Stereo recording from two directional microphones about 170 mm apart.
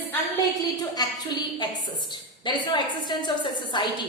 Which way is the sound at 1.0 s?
25° left (ahead or behind).